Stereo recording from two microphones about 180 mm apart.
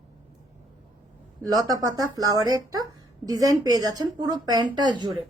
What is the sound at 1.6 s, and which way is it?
A woman's voice, 20° right (ahead or behind).